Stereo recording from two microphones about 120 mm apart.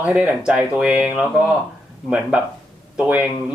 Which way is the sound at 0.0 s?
10° right (ahead or behind).